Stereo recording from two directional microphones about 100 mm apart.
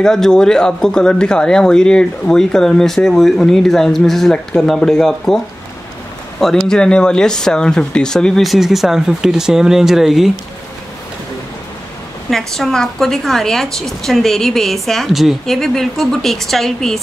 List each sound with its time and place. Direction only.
0.0 s speech: 5° left (ahead or behind)
6.4 s speech: 5° left (ahead or behind)
12.3 s speech: 5° left (ahead or behind)